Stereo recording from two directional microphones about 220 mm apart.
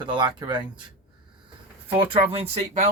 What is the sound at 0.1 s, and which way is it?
Speech, 20° right (ahead or behind).